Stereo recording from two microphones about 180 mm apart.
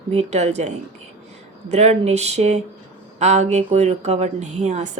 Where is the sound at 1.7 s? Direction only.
35° right (ahead or behind).